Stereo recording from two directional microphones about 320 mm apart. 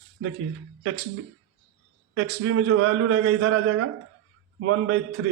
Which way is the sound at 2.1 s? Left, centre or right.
Right.